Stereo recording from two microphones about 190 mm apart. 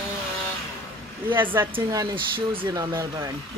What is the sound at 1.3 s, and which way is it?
Speech, 10° right (ahead or behind).